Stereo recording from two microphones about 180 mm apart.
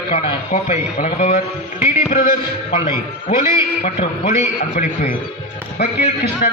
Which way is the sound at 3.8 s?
45° left (ahead or behind).